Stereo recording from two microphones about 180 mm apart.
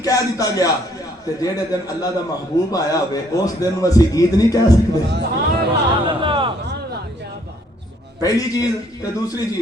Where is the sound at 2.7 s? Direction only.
20° left (ahead or behind).